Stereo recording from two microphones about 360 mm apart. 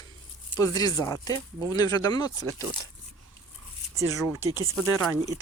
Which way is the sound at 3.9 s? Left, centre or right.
Centre.